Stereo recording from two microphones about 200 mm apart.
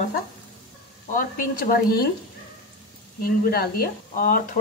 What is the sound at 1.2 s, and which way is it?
Speech, 45° left (ahead or behind).